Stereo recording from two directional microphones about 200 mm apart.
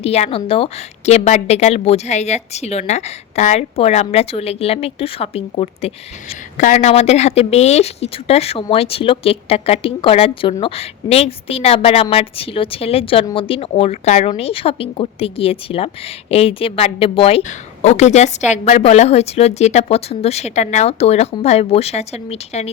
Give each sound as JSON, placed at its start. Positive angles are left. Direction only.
{"t": 0.0, "sound": "speech", "side_deg": 30}